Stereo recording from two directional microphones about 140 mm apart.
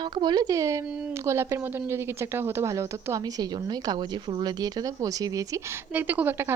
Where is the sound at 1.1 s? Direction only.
20° right (ahead or behind).